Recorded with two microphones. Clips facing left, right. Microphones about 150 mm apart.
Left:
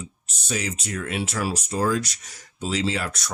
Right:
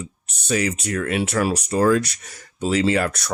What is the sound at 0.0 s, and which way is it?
Speech, 60° right (ahead or behind).